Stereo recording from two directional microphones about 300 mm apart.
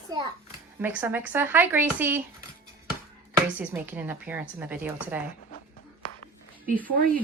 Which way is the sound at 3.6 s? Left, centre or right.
Centre.